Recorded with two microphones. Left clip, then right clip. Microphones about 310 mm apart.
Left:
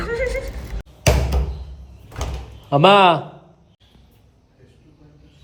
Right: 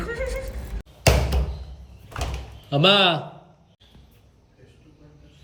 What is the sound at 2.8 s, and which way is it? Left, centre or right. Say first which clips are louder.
Speech: left 6 dB; centre.